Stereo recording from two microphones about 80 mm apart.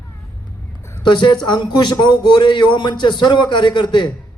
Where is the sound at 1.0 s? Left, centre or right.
Left.